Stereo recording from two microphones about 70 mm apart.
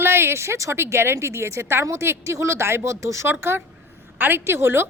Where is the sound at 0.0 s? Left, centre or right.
Right.